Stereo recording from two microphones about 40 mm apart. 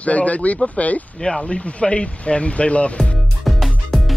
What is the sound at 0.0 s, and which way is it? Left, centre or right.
Speech, left.